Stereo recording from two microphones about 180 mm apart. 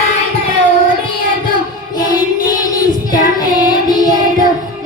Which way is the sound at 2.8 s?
50° left (ahead or behind).